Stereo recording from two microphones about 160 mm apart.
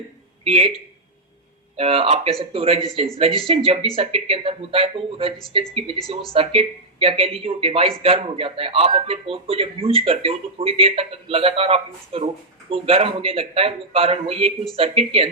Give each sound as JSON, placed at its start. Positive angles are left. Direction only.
{"t": 0.4, "sound": "speech", "side_deg": -35}